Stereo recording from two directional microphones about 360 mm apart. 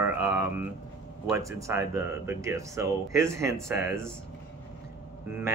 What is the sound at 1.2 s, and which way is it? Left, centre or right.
Speech, centre.